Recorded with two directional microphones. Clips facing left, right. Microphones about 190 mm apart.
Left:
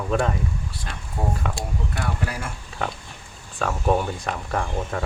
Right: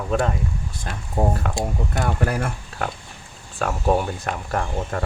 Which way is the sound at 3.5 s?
5° right (ahead or behind).